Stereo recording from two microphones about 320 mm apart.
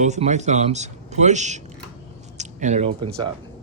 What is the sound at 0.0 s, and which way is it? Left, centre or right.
Speech, right.